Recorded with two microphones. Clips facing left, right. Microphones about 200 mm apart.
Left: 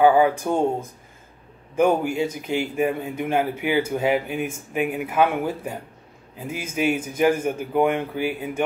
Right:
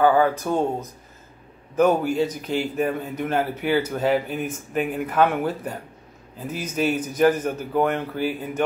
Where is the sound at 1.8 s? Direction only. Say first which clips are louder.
Right 1 dB; 10° left (ahead or behind).